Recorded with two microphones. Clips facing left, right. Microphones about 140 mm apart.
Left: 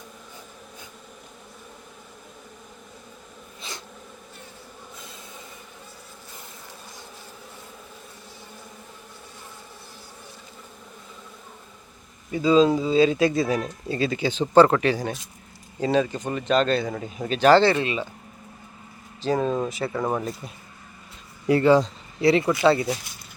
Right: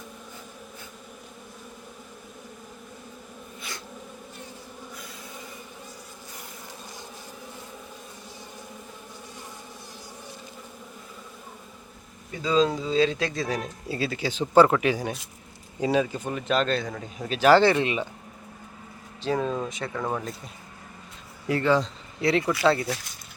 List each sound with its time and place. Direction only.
12.3 s speech: 5° left (ahead or behind)
13.8 s speech: 5° right (ahead or behind)
19.2 s speech: centre (ahead or behind)
21.4 s speech: 20° left (ahead or behind)
22.2 s speech: 5° left (ahead or behind)